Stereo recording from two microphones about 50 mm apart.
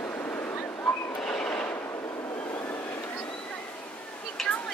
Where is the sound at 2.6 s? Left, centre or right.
Left.